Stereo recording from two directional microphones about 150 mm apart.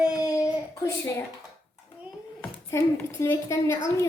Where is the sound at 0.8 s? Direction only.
20° left (ahead or behind).